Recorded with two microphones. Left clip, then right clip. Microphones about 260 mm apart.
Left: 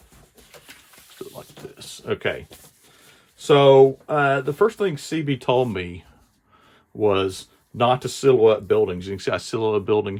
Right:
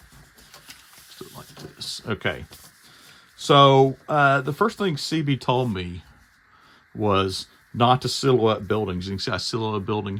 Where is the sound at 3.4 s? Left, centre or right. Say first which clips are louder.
Left 2 dB; right.